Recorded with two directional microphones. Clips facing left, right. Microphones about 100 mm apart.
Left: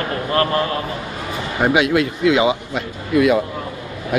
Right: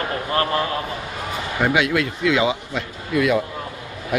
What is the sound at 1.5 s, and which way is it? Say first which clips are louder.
Speech: left 4 dB; 20° left (ahead or behind).